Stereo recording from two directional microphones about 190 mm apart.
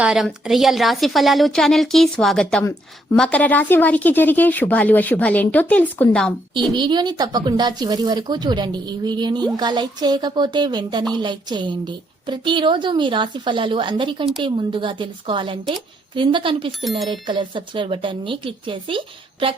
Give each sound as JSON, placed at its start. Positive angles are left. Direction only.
{"t": 0.0, "sound": "a woman's voice", "side_deg": 0}
{"t": 6.7, "sound": "a woman's voice", "side_deg": -25}